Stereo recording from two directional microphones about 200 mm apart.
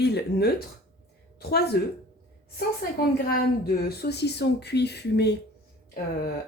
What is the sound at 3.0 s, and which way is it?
Speech, 50° left (ahead or behind).